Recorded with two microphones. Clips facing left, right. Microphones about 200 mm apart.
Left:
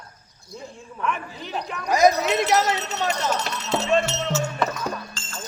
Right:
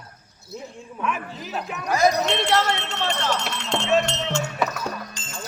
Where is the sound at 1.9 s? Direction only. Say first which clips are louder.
Left 3 dB; 15° left (ahead or behind).